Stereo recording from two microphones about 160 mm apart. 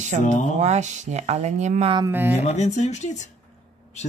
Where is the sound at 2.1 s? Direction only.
10° right (ahead or behind).